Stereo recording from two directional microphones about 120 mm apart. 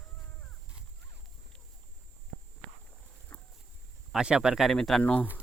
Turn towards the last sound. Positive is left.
turn(degrees=10)  # may be behind; listen again after turning